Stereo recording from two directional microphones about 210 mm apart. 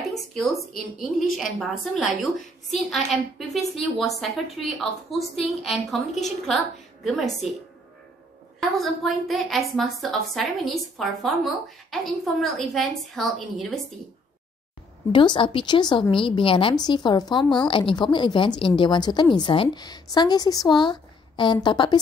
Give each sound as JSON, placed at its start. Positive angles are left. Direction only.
{"t": 0.3, "sound": "a woman's voice", "side_deg": 0}
{"t": 5.3, "sound": "a woman's voice", "side_deg": 0}
{"t": 8.5, "sound": "a woman's voice", "side_deg": 0}
{"t": 15.1, "sound": "a woman's voice", "side_deg": 25}